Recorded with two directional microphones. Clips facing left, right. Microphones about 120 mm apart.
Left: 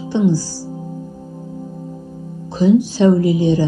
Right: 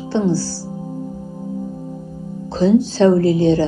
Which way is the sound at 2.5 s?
15° left (ahead or behind).